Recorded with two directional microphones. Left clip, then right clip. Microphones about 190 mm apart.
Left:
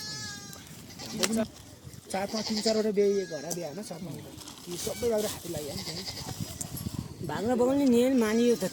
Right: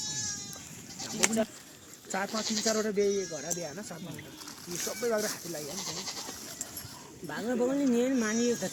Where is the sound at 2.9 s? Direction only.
65° left (ahead or behind).